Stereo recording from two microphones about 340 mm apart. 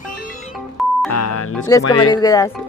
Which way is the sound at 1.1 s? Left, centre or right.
Left.